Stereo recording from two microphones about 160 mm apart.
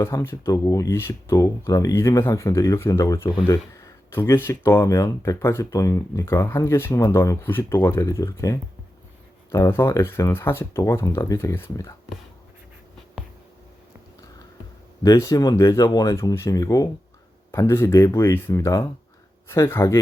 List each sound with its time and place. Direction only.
0.0 s speech: 15° left (ahead or behind)
3.2 s speech: 30° left (ahead or behind)
3.5 s speech: 20° left (ahead or behind)
15.0 s speech: 20° left (ahead or behind)